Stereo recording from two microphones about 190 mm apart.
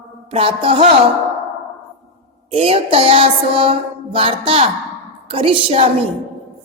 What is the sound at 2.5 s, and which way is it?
Music, 30° right (ahead or behind).